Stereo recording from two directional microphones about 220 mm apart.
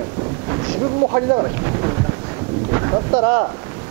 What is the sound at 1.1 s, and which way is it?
Speech, 25° right (ahead or behind).